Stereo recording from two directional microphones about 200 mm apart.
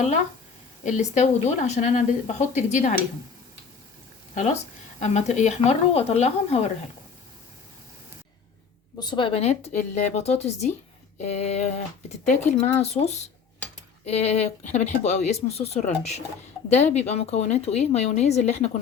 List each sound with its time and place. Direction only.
0.9 s speech: 35° left (ahead or behind)
4.9 s speech: 35° left (ahead or behind)
9.0 s speech: 25° left (ahead or behind)